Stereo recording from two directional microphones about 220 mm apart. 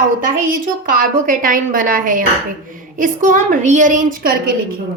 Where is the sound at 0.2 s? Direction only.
35° right (ahead or behind).